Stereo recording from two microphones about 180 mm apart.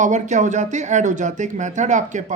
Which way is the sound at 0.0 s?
40° right (ahead or behind).